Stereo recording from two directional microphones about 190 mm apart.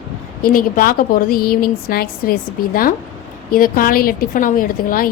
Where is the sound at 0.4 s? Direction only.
45° left (ahead or behind).